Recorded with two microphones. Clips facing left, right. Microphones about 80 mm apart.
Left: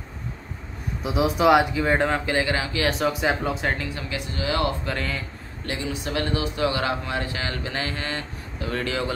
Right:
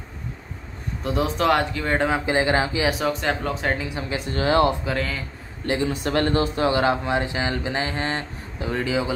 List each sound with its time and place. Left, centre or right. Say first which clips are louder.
1.0 s speech: left 2 dB; centre
2.2 s speech: right 4 dB; right
3.1 s speech: even; centre
3.7 s speech: right 3 dB; centre
4.3 s speech: right 6 dB; right
4.8 s speech: right 2 dB; centre
5.7 s speech: right 6 dB; right; by 9.1 s centre